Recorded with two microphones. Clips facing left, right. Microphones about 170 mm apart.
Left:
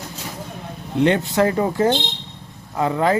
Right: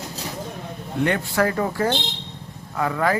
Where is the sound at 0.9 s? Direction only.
20° left (ahead or behind).